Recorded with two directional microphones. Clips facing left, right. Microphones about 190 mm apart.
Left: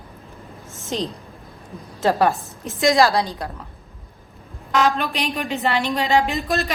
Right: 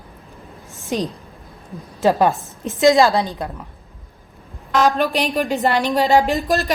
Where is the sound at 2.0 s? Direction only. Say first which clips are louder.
Right 2 dB; 15° right (ahead or behind).